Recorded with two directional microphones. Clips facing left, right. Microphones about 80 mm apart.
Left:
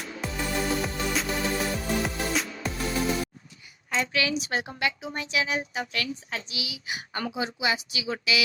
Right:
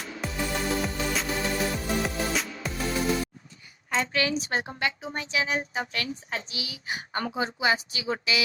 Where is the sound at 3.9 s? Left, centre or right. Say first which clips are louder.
Right 1 dB; right.